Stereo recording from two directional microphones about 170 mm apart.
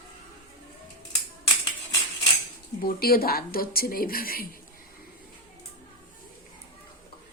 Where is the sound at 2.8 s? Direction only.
60° left (ahead or behind).